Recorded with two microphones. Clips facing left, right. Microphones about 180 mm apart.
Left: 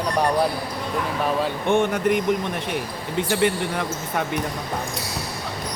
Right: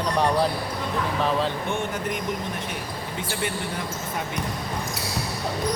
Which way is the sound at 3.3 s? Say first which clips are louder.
Left 8 dB; 65° left (ahead or behind).